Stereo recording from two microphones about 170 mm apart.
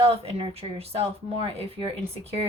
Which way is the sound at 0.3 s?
35° right (ahead or behind).